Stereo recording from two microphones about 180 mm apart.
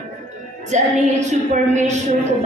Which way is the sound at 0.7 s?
40° right (ahead or behind).